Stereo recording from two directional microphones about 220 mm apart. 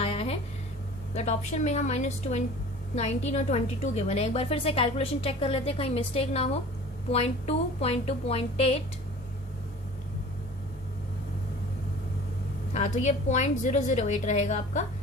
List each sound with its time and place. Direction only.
0.0 s a sound: 25° left (ahead or behind)
1.1 s a woman's voice: 30° left (ahead or behind)
12.7 s a woman's voice: 30° left (ahead or behind)